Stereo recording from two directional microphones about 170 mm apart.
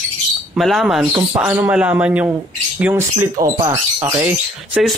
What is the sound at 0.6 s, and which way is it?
A man's voice, centre (ahead or behind).